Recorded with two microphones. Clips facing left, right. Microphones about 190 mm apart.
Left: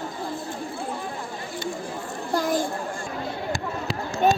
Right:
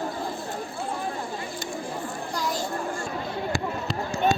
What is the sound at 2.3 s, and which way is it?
Children playing, 50° left (ahead or behind).